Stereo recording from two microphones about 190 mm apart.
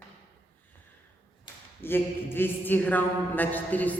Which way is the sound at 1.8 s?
10° left (ahead or behind).